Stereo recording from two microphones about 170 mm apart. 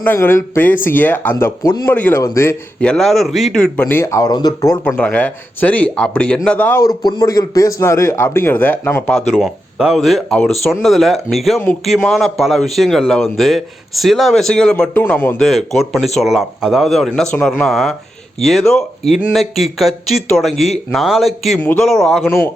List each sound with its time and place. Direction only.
0.0 s speech: 15° left (ahead or behind)
4.9 s speech: 10° left (ahead or behind)
7.0 s speech: 25° left (ahead or behind); by 9.2 s 10° left (ahead or behind)
9.3 s a man's voice: 5° right (ahead or behind)
21.6 s a man's voice: 10° left (ahead or behind)